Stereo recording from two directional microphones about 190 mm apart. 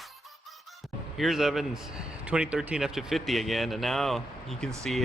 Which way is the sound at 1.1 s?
Centre (ahead or behind).